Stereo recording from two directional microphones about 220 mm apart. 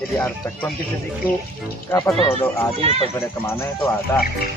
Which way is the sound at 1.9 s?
15° left (ahead or behind).